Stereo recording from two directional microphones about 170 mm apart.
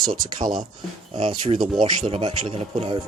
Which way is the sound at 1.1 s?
35° right (ahead or behind).